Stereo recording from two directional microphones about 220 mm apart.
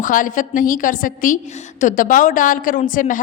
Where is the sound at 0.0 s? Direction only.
35° left (ahead or behind).